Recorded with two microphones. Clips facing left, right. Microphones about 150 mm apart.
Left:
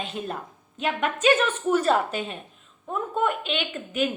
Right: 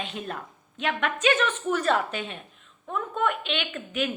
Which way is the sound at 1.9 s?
35° left (ahead or behind).